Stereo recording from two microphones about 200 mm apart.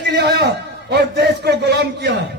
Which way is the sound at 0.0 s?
55° right (ahead or behind).